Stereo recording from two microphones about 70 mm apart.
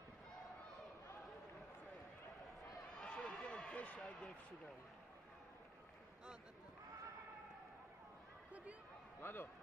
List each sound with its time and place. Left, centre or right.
3.0 s run: centre
9.2 s a man's voice: left